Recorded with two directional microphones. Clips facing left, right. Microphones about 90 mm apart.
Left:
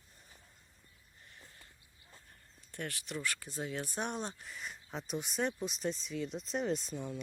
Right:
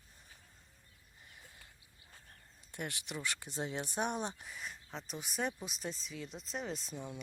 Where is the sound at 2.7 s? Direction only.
20° right (ahead or behind).